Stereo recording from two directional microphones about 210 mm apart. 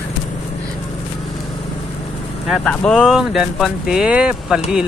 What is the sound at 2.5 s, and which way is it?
Speech, 5° left (ahead or behind).